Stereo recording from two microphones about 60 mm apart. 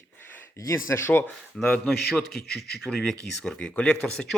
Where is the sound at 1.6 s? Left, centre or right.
Centre.